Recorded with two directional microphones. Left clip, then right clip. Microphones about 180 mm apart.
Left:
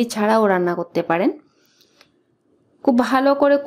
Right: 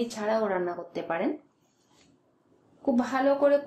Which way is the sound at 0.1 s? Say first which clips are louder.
Left 13 dB; 45° left (ahead or behind).